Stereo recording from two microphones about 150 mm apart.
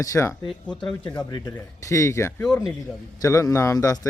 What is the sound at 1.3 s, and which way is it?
A man's voice, 20° left (ahead or behind).